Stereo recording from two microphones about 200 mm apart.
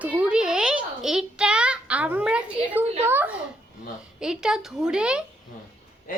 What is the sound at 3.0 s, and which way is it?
A child's voice, 10° right (ahead or behind).